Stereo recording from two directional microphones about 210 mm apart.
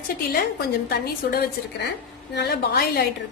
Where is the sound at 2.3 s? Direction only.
50° left (ahead or behind).